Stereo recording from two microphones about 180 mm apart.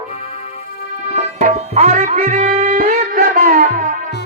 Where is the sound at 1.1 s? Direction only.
40° right (ahead or behind).